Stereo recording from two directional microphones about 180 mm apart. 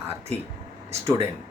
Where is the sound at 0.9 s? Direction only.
15° right (ahead or behind).